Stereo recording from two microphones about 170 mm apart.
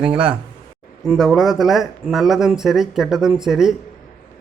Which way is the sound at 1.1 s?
Centre (ahead or behind).